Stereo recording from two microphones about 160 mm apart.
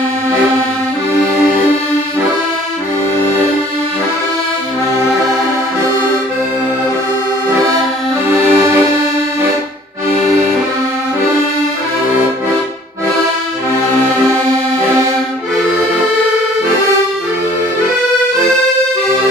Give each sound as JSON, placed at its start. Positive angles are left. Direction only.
{"t": 1.2, "sound": "music", "side_deg": -15}
{"t": 8.3, "sound": "accordion", "side_deg": -15}